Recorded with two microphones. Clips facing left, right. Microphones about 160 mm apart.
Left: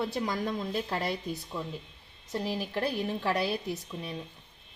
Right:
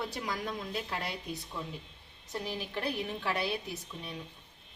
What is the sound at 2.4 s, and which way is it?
A woman's voice, 40° left (ahead or behind).